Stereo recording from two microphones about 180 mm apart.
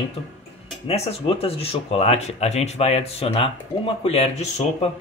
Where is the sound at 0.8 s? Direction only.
35° left (ahead or behind).